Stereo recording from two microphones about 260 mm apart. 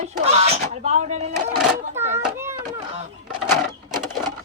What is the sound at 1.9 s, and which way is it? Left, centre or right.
Speech, centre.